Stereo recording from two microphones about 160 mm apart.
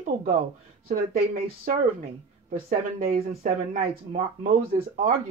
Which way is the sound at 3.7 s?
55° right (ahead or behind).